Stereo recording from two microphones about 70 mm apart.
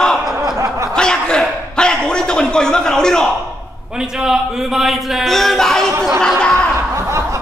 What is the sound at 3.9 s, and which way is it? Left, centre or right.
A man's voice, centre.